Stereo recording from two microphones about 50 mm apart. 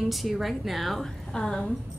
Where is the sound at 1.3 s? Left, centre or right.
Centre.